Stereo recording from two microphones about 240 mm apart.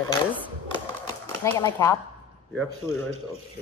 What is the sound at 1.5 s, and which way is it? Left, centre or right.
Speech, centre.